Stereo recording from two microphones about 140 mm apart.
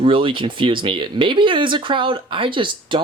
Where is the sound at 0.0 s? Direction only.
40° right (ahead or behind).